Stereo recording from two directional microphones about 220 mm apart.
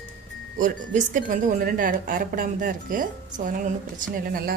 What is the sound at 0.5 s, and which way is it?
Speech, 35° right (ahead or behind).